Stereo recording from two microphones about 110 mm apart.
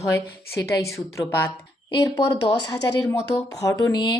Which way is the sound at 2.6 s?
35° left (ahead or behind).